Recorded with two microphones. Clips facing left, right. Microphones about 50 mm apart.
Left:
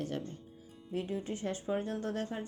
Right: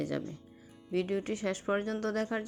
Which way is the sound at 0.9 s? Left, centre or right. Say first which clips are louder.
Right 5 dB; right.